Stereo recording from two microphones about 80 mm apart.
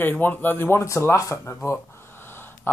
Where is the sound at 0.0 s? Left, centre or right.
Left.